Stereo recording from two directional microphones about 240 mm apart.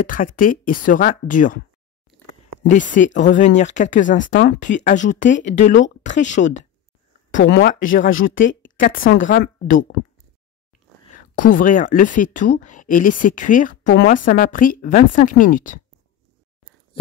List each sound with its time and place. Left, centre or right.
0.0 s speech: left
2.7 s speech: left
7.3 s speech: left
8.1 s speech: left
8.7 s a woman's voice: left
9.7 s speech: left
11.1 s speech: left